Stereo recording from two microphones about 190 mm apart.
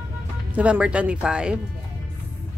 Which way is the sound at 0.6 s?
5° right (ahead or behind).